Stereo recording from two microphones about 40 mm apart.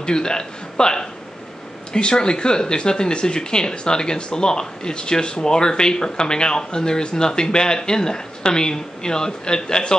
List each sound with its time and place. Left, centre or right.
0.0 s a man's voice: left